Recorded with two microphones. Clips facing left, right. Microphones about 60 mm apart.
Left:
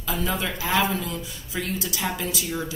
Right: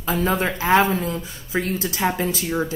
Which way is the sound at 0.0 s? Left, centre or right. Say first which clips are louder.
Right 6 dB; right.